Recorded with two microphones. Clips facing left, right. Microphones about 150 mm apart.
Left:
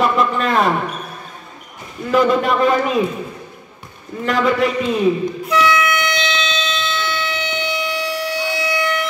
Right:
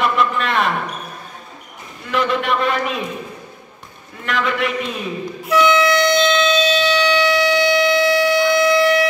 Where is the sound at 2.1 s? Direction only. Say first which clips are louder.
Left 4 dB; 35° left (ahead or behind).